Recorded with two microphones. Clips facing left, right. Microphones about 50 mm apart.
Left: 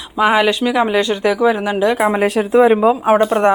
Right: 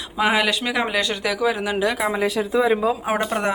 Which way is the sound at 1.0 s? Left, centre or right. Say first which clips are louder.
Left 7 dB; left.